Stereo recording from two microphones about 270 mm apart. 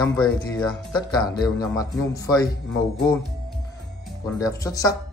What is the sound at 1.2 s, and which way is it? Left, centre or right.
Speech, centre.